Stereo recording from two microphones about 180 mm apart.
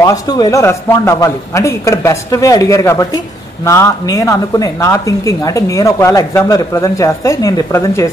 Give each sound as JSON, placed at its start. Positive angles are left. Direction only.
{"t": 0.0, "sound": "a woman's voice", "side_deg": 20}